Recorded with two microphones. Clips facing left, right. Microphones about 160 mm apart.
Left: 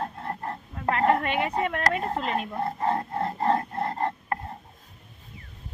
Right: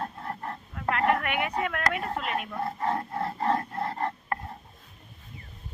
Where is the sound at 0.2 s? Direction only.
25° left (ahead or behind).